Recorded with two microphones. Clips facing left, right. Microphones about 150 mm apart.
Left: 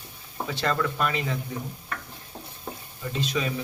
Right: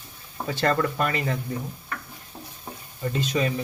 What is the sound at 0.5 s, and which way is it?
Speech, 50° right (ahead or behind).